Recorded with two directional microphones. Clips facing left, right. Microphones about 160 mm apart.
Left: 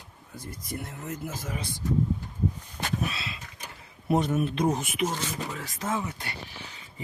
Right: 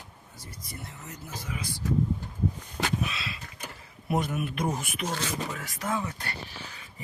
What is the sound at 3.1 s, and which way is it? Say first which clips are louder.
Vehicle: left 1 dB; 25° left (ahead or behind).